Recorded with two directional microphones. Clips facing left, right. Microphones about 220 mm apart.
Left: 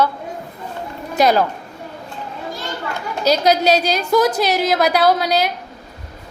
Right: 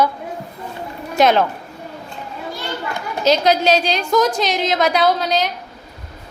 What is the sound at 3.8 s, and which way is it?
A woman's voice, 5° left (ahead or behind).